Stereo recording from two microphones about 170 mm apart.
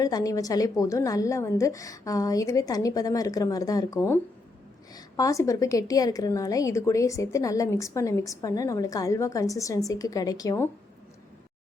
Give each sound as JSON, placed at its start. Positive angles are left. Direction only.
{"t": 0.0, "sound": "a woman's voice", "side_deg": 20}